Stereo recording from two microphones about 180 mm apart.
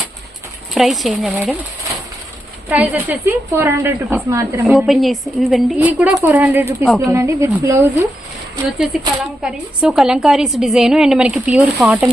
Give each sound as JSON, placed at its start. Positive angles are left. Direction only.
{"t": 0.7, "sound": "a woman's voice", "side_deg": 0}
{"t": 2.6, "sound": "a woman's voice", "side_deg": -10}
{"t": 4.9, "sound": "a woman's voice", "side_deg": 0}
{"t": 8.9, "sound": "a woman's voice", "side_deg": 0}